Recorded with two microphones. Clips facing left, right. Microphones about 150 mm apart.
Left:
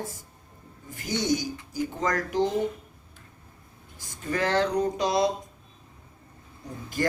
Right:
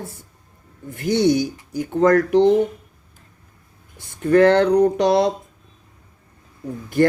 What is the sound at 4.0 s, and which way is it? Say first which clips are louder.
Speech: right 14 dB; 60° right (ahead or behind).